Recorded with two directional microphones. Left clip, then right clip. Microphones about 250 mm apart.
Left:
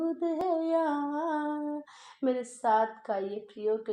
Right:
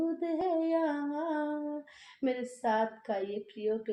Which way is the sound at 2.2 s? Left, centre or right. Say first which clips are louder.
Left 3 dB; left.